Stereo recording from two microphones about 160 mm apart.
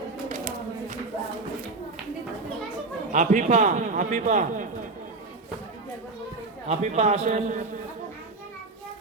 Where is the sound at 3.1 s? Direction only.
50° right (ahead or behind).